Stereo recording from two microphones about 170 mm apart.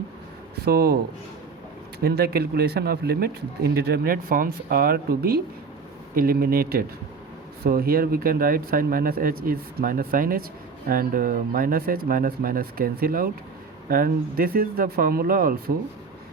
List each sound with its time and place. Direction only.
0.6 s speech: 65° right (ahead or behind)
2.0 s speech: 65° right (ahead or behind)